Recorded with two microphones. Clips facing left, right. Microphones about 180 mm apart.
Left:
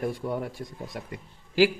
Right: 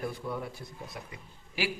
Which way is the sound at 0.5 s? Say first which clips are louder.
Left 6 dB; 90° left.